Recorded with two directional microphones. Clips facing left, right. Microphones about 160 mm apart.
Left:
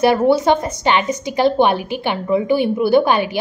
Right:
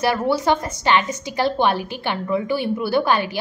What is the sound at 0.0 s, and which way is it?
A woman's voice, 20° left (ahead or behind).